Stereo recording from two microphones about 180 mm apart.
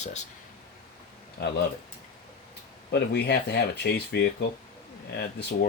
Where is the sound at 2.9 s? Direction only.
65° left (ahead or behind).